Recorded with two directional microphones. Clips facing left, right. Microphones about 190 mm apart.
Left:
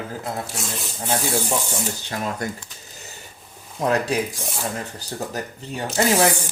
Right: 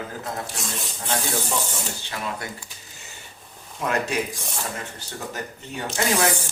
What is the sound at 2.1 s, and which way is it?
Speech, 40° left (ahead or behind).